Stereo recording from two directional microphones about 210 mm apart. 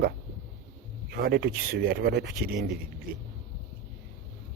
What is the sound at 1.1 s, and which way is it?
Speech, 50° right (ahead or behind).